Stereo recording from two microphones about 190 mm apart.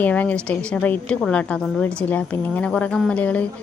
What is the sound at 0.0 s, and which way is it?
A woman's voice, 10° left (ahead or behind).